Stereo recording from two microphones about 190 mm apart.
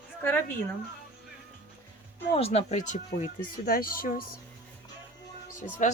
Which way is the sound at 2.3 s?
35° left (ahead or behind).